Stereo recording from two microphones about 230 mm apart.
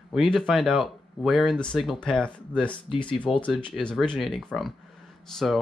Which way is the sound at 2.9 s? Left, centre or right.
Left.